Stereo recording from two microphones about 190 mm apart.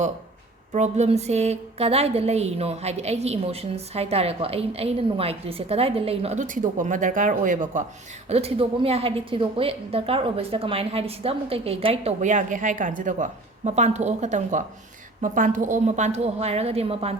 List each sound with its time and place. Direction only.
0.7 s a woman's voice: 35° right (ahead or behind)
8.3 s a woman's voice: 30° right (ahead or behind)